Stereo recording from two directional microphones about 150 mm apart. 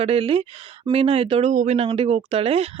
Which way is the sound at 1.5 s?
50° right (ahead or behind).